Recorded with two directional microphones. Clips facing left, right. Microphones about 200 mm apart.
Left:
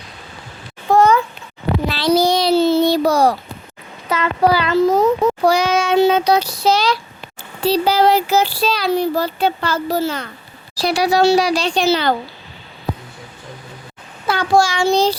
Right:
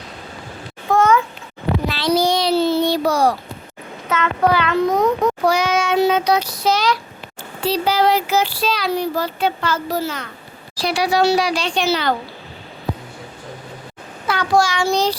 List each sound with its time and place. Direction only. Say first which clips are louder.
0.9 s a sound: left 2 dB; 35° left (ahead or behind)
1.9 s child singing: left 3 dB; 35° left (ahead or behind)
4.1 s speech: left 2 dB; 35° left (ahead or behind)
4.8 s a child's voice: left 5 dB; 5° left (ahead or behind)
5.0 s speech: left 2 dB; 30° left (ahead or behind)
14.3 s a child's voice: left 2 dB; 30° left (ahead or behind)